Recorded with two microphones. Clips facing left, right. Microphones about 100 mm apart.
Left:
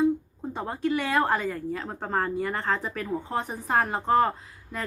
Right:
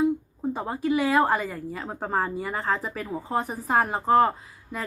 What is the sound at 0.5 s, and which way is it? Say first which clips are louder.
A woman's voice: right 1 dB; 5° right (ahead or behind).